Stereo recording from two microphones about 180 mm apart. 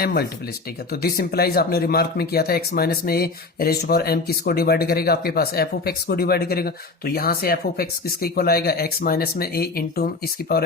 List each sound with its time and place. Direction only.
0.0 s speech: 55° left (ahead or behind)